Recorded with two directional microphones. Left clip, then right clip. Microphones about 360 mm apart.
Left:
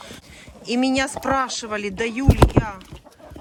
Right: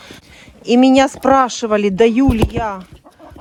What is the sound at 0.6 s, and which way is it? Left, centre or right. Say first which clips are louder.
Speech: right 10 dB; centre.